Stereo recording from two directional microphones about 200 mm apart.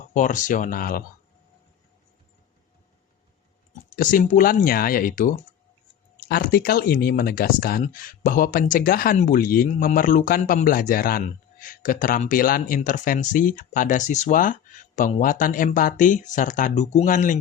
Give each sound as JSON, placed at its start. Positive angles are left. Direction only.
{"t": 0.1, "sound": "speech", "side_deg": 40}
{"t": 3.8, "sound": "speech", "side_deg": 45}